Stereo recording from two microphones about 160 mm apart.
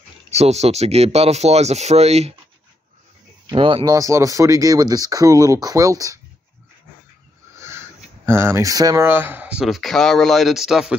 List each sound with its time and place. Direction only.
0.3 s speech: 45° right (ahead or behind)
3.4 s speech: 30° right (ahead or behind)
3.9 s speech: 20° right (ahead or behind)
8.3 s speech: 15° right (ahead or behind)